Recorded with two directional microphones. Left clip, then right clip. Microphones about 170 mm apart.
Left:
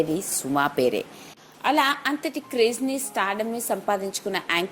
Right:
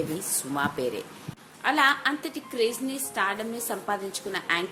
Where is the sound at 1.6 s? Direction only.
30° left (ahead or behind).